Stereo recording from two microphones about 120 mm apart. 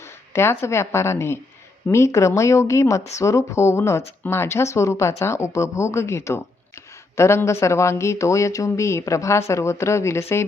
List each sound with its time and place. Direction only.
0.0 s a woman's voice: 20° left (ahead or behind)